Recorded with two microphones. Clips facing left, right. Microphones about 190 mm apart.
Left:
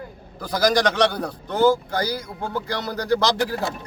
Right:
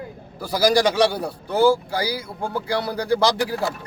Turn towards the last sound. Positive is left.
turn(degrees=-10)  # may be behind; listen again after turning